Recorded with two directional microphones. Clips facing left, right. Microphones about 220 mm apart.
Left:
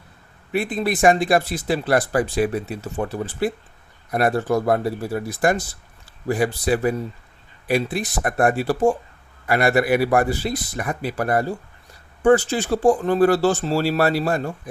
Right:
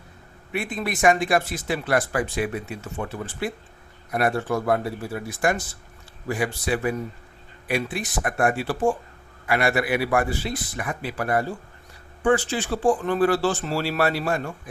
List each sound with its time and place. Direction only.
0.5 s speech: 35° left (ahead or behind)